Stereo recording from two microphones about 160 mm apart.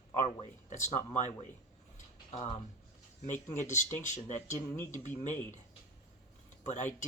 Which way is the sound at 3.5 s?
50° left (ahead or behind).